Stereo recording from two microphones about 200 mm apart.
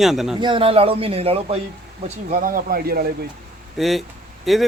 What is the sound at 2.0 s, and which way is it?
Speech, 40° right (ahead or behind).